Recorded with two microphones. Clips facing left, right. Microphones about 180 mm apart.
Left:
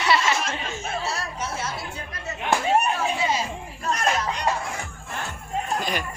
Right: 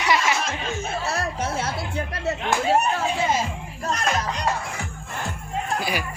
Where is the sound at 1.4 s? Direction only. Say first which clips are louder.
Right 4 dB; 55° right (ahead or behind).